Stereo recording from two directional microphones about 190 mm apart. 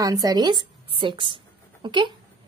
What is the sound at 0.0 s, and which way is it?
Speech, 20° right (ahead or behind).